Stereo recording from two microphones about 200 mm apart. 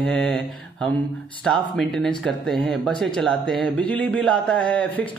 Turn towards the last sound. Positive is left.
turn(degrees=5)  # may be behind; listen again after turning